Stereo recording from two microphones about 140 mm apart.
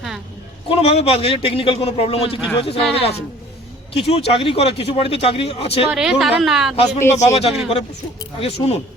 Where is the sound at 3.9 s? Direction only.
45° left (ahead or behind).